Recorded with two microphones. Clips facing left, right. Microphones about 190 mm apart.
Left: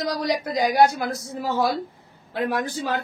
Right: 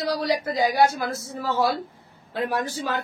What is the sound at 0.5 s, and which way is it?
A woman's voice, 15° left (ahead or behind).